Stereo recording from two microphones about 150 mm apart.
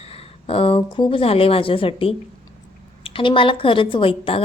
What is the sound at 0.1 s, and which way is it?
A woman's voice, 40° left (ahead or behind).